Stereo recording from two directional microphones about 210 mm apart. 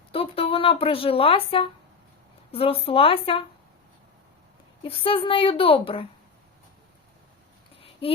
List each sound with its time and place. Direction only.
0.1 s a woman's voice: 25° left (ahead or behind)
4.8 s a woman's voice: 25° left (ahead or behind)